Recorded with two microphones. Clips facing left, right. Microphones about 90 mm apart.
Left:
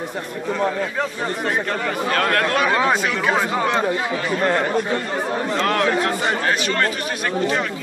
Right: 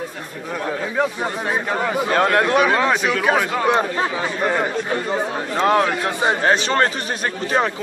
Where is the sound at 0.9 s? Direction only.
10° right (ahead or behind).